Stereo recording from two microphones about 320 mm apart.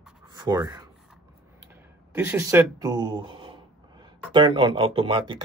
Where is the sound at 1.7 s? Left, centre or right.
Centre.